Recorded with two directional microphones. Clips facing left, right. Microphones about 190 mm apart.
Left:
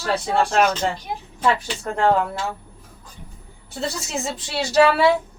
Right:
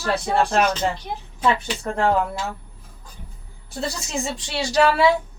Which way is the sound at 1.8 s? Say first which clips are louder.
Left 2 dB; 5° right (ahead or behind).